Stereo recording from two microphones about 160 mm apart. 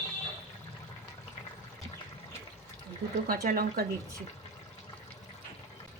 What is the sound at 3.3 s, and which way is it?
Speech, 65° right (ahead or behind).